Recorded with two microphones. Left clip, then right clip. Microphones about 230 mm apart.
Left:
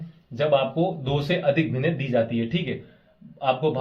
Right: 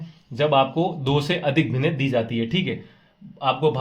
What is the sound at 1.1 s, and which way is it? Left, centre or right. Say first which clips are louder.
Speech: even; right.